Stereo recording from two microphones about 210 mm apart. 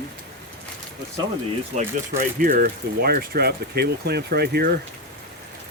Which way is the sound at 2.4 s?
40° right (ahead or behind).